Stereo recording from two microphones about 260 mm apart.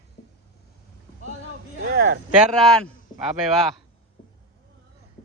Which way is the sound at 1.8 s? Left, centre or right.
Right.